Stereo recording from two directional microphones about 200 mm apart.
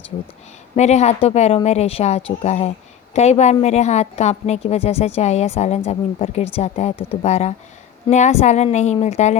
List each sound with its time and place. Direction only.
0.8 s speech: 35° left (ahead or behind)